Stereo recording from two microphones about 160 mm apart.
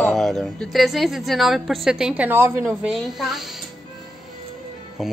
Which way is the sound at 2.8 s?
Centre (ahead or behind).